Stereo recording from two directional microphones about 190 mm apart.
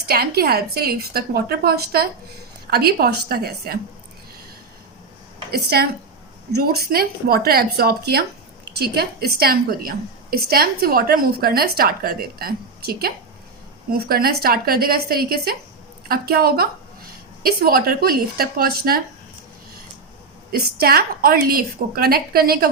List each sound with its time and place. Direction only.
0.1 s a woman's voice: 55° right (ahead or behind)
5.5 s a woman's voice: 55° right (ahead or behind)
20.5 s a woman's voice: 55° right (ahead or behind)